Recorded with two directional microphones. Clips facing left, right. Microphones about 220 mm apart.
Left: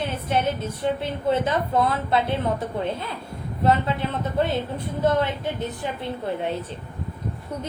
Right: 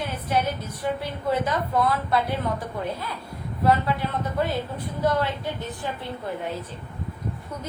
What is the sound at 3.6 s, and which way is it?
Speech, 25° left (ahead or behind).